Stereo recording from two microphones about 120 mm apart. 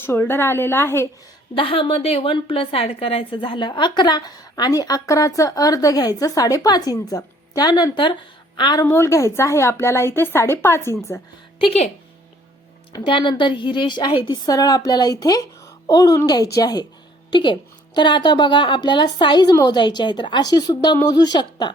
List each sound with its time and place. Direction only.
0.0 s a woman's voice: 20° left (ahead or behind)
1.5 s a woman's voice: 50° left (ahead or behind)
8.8 s a woman's voice: 20° left (ahead or behind)
11.6 s a woman's voice: 60° left (ahead or behind)
12.9 s a woman's voice: 40° left (ahead or behind)